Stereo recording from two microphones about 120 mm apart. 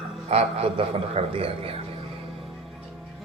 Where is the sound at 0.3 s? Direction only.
60° right (ahead or behind).